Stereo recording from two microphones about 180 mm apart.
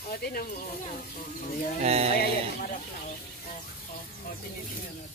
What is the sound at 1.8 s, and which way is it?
Speech, 35° right (ahead or behind).